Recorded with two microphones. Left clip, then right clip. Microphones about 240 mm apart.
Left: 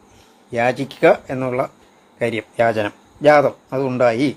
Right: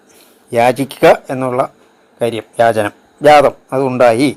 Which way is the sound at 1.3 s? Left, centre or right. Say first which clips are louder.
Right 6 dB; centre.